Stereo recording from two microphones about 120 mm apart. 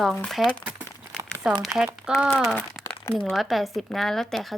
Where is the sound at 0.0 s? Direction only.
Centre (ahead or behind).